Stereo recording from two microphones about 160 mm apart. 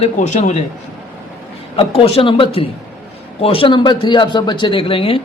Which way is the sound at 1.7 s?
35° left (ahead or behind).